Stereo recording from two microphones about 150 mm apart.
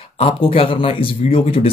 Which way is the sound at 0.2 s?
35° left (ahead or behind).